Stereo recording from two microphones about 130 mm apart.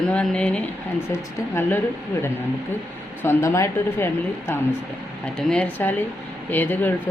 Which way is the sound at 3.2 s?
20° left (ahead or behind).